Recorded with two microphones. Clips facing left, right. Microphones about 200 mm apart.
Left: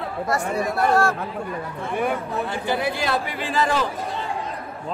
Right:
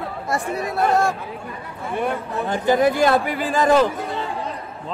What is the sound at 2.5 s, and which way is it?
Speech, 45° right (ahead or behind).